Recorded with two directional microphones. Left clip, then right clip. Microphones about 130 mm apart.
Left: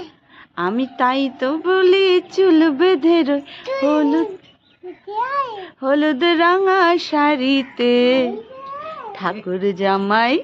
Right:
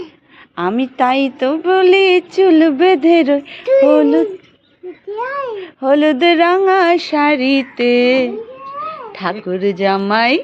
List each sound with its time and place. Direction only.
0.5 s a woman's voice: 15° right (ahead or behind)
5.5 s a woman's voice: 15° right (ahead or behind); by 8.4 s centre (ahead or behind)
9.5 s a woman's voice: 15° right (ahead or behind)